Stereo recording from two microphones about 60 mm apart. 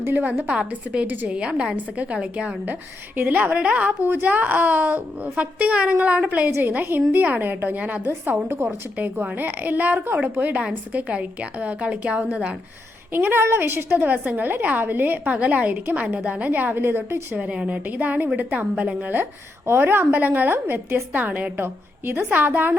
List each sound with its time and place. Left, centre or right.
0.0 s a woman's voice: right
0.5 s a woman's voice: centre
1.0 s a woman's voice: right
1.3 s a woman's voice: centre
4.0 s a woman's voice: right
6.6 s a woman's voice: right
13.1 s a woman's voice: right
13.9 s a woman's voice: right
15.7 s a woman's voice: right
17.3 s a woman's voice: right
21.6 s a woman's voice: right